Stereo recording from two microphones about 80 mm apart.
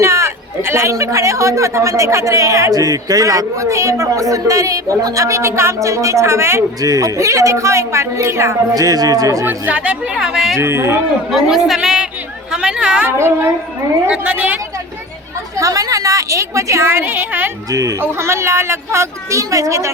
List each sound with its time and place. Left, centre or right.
0.0 s a man's voice: right
8.7 s a man's voice: right
9.5 s a woman's voice: centre
10.2 s speech: centre
10.6 s a man's voice: right
11.3 s a woman's voice: centre
13.1 s a man's voice: right
14.1 s a woman's voice: centre
15.5 s a man's voice: right
17.7 s a man's voice: right
18.0 s a man's voice: right